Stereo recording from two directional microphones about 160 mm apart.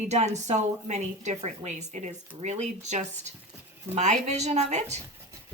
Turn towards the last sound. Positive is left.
turn(degrees=-45)  # may be behind; listen again after turning